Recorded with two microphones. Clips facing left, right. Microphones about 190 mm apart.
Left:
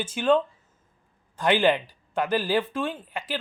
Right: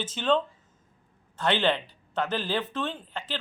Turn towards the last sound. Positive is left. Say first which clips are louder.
# left 3 dB
turn(degrees=10)  # may be behind; listen again after turning